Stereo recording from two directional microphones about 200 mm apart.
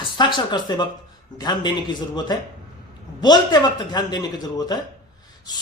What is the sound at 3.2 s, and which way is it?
A man's voice, 20° left (ahead or behind).